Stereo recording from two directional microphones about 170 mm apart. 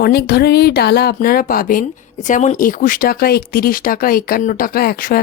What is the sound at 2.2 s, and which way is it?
A woman's voice, 45° left (ahead or behind).